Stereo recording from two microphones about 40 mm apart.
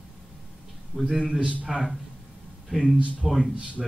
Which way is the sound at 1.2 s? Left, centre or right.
Right.